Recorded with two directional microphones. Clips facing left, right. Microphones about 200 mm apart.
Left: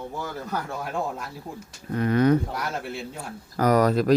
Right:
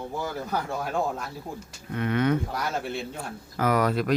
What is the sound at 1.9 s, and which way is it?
Speech, 35° left (ahead or behind).